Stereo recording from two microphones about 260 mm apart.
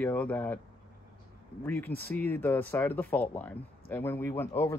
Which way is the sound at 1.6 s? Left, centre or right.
Centre.